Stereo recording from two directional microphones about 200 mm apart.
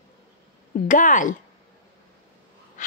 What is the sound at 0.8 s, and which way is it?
Speech, 40° left (ahead or behind).